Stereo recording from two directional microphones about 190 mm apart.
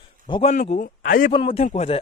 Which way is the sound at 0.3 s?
25° left (ahead or behind).